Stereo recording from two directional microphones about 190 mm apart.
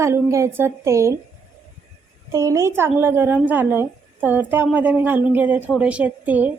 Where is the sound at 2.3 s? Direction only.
15° right (ahead or behind).